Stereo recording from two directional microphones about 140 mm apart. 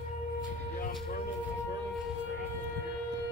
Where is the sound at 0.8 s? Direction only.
85° left.